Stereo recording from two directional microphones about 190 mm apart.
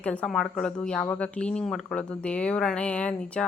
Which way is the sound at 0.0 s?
5° left (ahead or behind).